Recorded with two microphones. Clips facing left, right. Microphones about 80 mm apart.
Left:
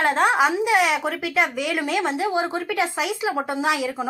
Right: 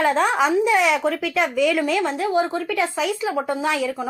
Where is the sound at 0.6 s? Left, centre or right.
Left.